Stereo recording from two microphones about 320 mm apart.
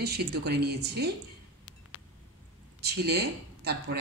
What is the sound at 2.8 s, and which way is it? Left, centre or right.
Speech, right.